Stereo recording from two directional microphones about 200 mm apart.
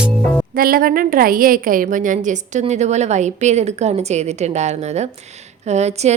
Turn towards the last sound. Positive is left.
turn(degrees=-35)  # may be behind; listen again after turning